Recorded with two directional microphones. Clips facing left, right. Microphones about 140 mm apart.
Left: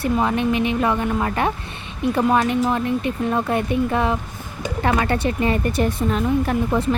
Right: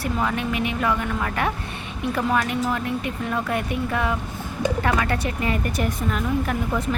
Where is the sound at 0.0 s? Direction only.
25° left (ahead or behind).